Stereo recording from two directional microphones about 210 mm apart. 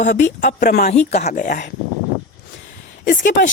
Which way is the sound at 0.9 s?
30° left (ahead or behind).